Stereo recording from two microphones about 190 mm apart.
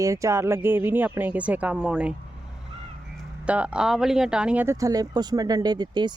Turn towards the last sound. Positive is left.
turn(degrees=-25)  # may be behind; listen again after turning